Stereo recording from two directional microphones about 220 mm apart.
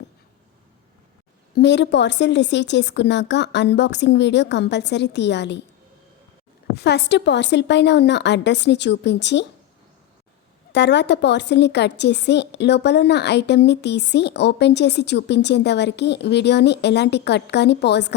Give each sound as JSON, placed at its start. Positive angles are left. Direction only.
{"t": 1.5, "sound": "a woman's voice", "side_deg": 50}
{"t": 6.7, "sound": "a woman's voice", "side_deg": 50}
{"t": 10.7, "sound": "a woman's voice", "side_deg": 50}